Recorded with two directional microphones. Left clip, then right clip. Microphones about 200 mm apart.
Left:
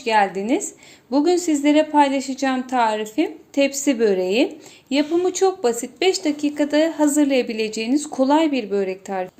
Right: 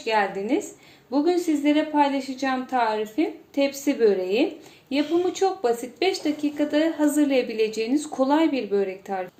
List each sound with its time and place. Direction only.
0.0 s speech: 50° left (ahead or behind)
1.1 s a woman's voice: 40° left (ahead or behind)